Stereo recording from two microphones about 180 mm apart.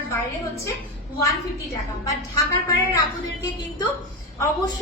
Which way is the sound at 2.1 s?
20° left (ahead or behind).